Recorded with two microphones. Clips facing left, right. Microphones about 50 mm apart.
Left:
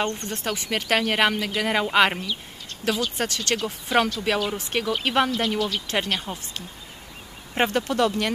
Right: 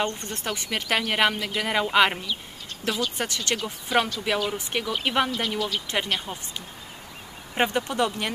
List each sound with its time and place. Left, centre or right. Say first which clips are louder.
0.0 s speech: left 2 dB; centre
4.6 s speech: left 2 dB; centre
5.0 s speech: left 2 dB; centre
7.7 s speech: left 3 dB; centre